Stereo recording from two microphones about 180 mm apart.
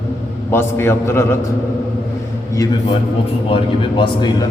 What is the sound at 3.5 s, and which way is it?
Speech, 30° left (ahead or behind).